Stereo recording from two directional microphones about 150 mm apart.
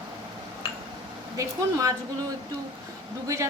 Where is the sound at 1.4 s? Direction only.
20° right (ahead or behind).